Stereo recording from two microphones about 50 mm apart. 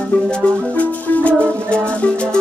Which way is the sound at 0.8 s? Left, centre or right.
Left.